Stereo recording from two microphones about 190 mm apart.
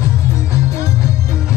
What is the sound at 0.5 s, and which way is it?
Music, 15° left (ahead or behind).